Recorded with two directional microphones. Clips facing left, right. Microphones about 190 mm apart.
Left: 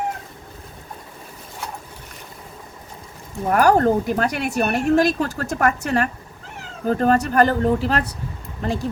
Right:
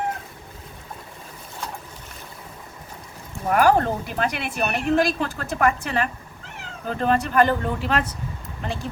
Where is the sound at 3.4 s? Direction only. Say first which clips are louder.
Left 3 dB; 40° left (ahead or behind).